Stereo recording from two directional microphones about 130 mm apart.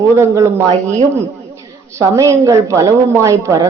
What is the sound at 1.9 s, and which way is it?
A woman's voice, 20° right (ahead or behind).